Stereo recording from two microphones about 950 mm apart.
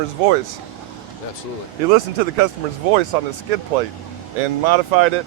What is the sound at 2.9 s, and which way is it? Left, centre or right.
Speech, right.